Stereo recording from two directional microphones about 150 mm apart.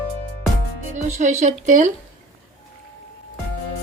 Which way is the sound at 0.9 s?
50° right (ahead or behind).